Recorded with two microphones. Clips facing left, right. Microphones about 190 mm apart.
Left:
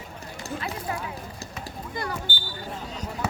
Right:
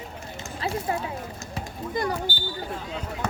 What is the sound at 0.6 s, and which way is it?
Clip-clop, 30° right (ahead or behind).